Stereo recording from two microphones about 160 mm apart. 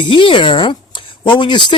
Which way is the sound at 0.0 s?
30° left (ahead or behind).